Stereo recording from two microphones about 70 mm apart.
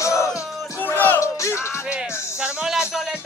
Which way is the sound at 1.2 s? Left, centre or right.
Left.